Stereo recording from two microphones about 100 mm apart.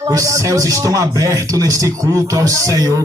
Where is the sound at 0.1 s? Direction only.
35° right (ahead or behind).